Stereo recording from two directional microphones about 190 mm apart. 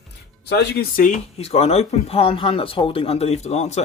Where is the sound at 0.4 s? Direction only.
60° left (ahead or behind).